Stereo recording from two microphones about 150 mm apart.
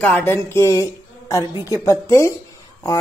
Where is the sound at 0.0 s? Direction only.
10° left (ahead or behind).